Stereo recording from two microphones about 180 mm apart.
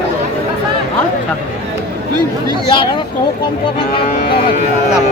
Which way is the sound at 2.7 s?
25° left (ahead or behind).